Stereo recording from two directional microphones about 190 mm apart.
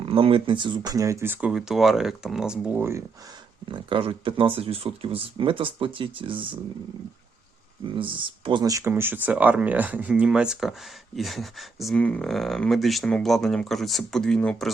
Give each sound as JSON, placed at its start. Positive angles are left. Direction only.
{"t": 0.0, "sound": "speech", "side_deg": -30}
{"t": 3.7, "sound": "speech", "side_deg": -25}
{"t": 7.9, "sound": "speech", "side_deg": -25}